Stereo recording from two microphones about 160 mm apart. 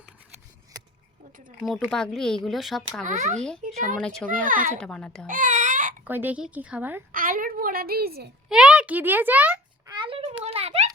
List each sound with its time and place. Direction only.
1.6 s speech: centre (ahead or behind)
3.0 s a child's voice: 50° right (ahead or behind)
4.0 s a child's voice: 5° left (ahead or behind)
4.4 s a woman's voice: 55° right (ahead or behind)
4.8 s speech: 5° left (ahead or behind)
5.2 s baby cry: 55° right (ahead or behind)
6.1 s speech: 10° right (ahead or behind)
7.1 s a woman's voice: 60° right (ahead or behind)
8.4 s a child's voice: 5° right (ahead or behind)
9.8 s a sound: 30° right (ahead or behind)